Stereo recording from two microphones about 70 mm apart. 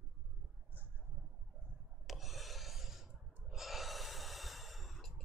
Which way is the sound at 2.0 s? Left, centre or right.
Centre.